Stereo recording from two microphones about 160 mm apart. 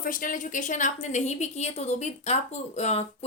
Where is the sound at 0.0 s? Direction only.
60° left (ahead or behind).